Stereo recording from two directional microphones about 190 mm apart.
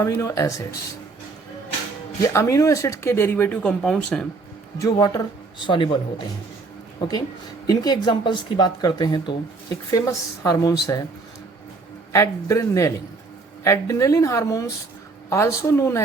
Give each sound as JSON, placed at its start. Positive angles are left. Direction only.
{"t": 0.0, "sound": "speech", "side_deg": 15}
{"t": 2.2, "sound": "speech", "side_deg": 15}
{"t": 4.8, "sound": "speech", "side_deg": 20}
{"t": 7.7, "sound": "speech", "side_deg": 20}
{"t": 12.1, "sound": "speech", "side_deg": 15}